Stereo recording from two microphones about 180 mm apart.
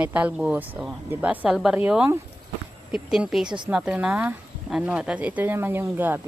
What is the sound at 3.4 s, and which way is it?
Speech, 25° right (ahead or behind).